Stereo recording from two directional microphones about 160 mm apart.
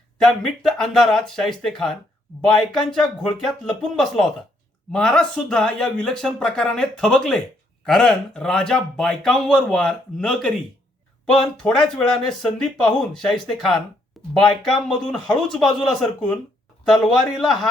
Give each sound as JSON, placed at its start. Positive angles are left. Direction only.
{"t": 0.2, "sound": "speech", "side_deg": 5}